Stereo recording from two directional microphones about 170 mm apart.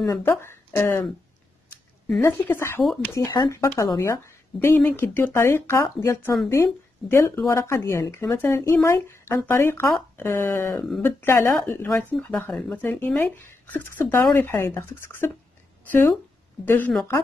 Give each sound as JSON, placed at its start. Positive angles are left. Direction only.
{"t": 0.0, "sound": "speech", "side_deg": 15}
{"t": 2.0, "sound": "speech", "side_deg": 10}
{"t": 16.6, "sound": "speech", "side_deg": 10}